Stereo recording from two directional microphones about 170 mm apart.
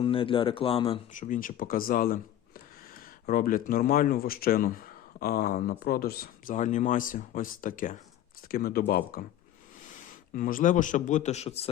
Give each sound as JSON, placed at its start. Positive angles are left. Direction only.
{"t": 0.0, "sound": "speech", "side_deg": 30}
{"t": 1.1, "sound": "speech", "side_deg": 50}
{"t": 3.2, "sound": "speech", "side_deg": 55}
{"t": 8.4, "sound": "speech", "side_deg": 65}
{"t": 10.3, "sound": "a man's voice", "side_deg": 50}